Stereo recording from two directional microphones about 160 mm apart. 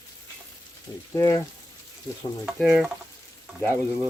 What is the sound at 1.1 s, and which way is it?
Speech, 20° left (ahead or behind).